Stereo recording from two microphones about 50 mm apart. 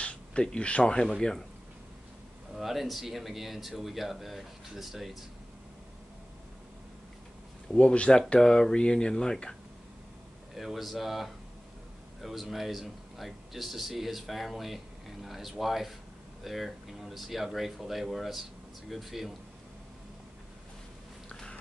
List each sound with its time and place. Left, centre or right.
0.0 s speech: left
2.5 s speech: centre
7.7 s speech: left
10.5 s speech: centre